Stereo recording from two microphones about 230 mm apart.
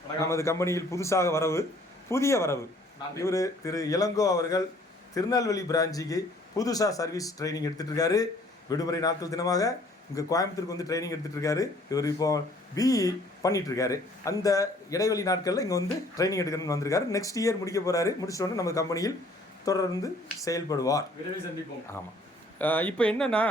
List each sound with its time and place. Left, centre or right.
0.2 s speech: centre
22.5 s speech: centre